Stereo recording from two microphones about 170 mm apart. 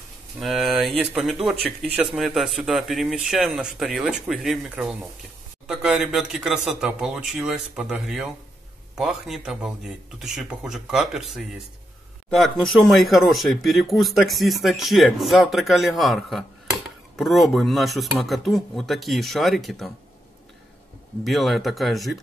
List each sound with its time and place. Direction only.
0.4 s speech: centre (ahead or behind)
21.2 s speech: centre (ahead or behind)